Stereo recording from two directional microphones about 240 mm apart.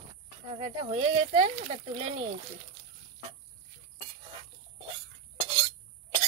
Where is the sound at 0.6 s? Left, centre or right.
Right.